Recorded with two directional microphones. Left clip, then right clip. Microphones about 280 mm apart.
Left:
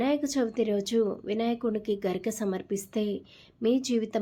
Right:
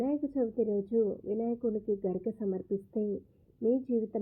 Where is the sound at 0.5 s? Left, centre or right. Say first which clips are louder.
Left 3 dB; left.